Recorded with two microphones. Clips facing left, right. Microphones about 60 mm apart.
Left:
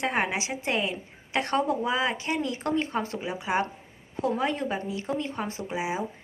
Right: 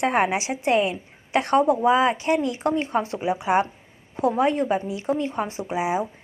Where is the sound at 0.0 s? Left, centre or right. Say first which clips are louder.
Right 6 dB; right.